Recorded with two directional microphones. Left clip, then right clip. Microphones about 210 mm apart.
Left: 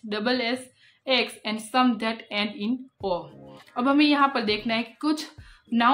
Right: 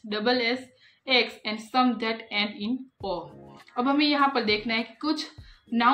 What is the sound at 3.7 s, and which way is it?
A woman's voice, 45° left (ahead or behind).